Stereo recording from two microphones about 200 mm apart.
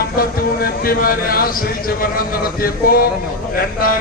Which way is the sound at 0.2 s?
45° left (ahead or behind).